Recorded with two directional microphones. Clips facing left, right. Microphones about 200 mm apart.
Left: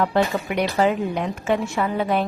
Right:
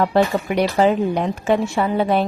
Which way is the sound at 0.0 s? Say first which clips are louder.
Right 3 dB; 35° right (ahead or behind).